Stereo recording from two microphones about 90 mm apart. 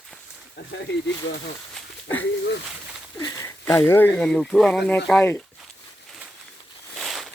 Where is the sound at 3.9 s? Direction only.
25° left (ahead or behind).